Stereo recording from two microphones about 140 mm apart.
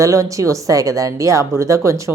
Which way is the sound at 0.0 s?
25° right (ahead or behind).